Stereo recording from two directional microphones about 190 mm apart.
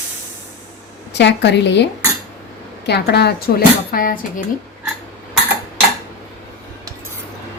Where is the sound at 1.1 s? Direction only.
65° left (ahead or behind); by 4.4 s 50° left (ahead or behind).